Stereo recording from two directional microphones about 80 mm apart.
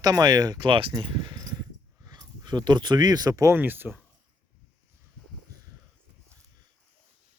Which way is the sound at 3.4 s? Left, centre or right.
Right.